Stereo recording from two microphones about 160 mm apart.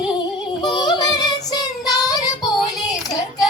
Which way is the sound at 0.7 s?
25° left (ahead or behind).